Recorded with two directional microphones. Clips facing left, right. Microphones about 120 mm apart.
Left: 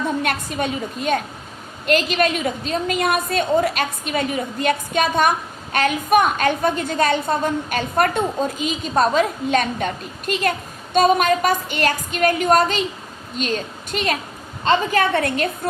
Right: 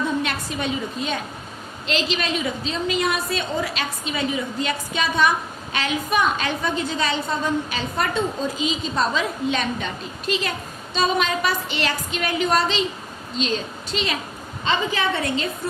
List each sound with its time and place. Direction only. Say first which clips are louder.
0.2 s a woman's voice: left 3 dB; 50° left (ahead or behind)